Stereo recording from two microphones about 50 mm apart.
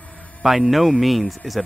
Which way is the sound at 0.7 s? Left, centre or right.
Centre.